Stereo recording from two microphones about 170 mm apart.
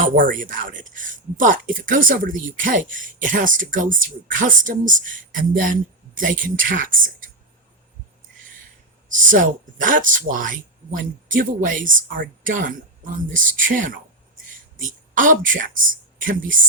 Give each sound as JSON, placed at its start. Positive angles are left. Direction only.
{"t": 0.0, "sound": "speech", "side_deg": -55}
{"t": 9.3, "sound": "a woman's voice", "side_deg": -50}